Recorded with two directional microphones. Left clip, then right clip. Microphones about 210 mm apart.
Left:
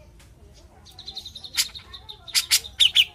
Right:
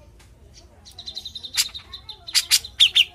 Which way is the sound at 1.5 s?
20° right (ahead or behind).